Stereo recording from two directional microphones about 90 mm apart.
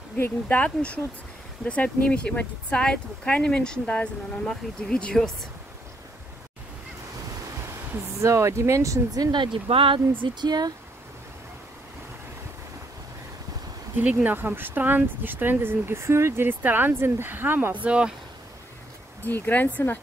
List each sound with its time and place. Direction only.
0.2 s speech: 20° left (ahead or behind)
7.9 s speech: 30° right (ahead or behind); by 10.7 s 55° right (ahead or behind)
13.9 s speech: 20° right (ahead or behind)
17.8 s speech: 10° right (ahead or behind)
19.2 s speech: 20° left (ahead or behind)